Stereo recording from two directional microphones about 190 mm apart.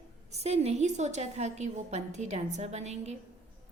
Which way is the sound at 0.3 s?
35° right (ahead or behind).